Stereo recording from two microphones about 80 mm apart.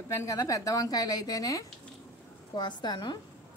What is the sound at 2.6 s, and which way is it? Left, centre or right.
Speech, left.